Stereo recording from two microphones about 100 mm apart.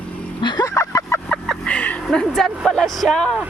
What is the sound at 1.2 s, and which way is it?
Music, 5° left (ahead or behind).